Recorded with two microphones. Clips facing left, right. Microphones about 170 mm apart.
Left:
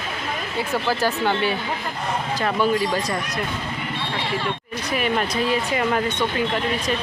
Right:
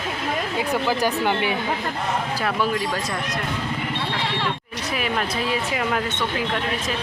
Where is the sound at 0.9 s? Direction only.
15° right (ahead or behind).